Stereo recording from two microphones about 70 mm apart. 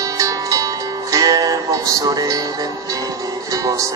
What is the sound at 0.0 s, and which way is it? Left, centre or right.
Music, right.